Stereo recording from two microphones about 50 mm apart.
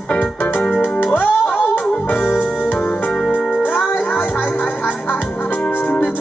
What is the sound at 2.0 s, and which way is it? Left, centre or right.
Keyboard, left.